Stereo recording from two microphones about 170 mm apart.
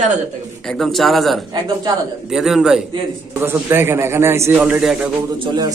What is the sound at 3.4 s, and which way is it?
A man's voice, 15° right (ahead or behind).